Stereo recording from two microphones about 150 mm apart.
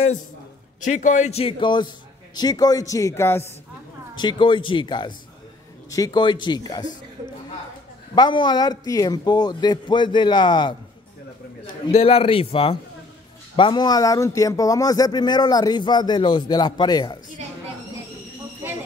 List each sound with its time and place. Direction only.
0.7 s a man's voice: 55° left (ahead or behind); by 3.4 s 15° left (ahead or behind)
4.2 s speech: 30° left (ahead or behind)
8.1 s speech: 30° left (ahead or behind)
11.9 s speech: 40° left (ahead or behind)
18.6 s a sound: 15° right (ahead or behind)